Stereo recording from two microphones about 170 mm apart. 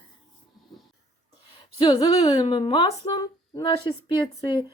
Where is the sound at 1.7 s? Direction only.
25° left (ahead or behind).